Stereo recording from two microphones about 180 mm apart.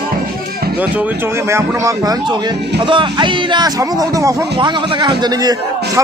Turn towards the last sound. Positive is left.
turn(degrees=-25)  # may be behind; listen again after turning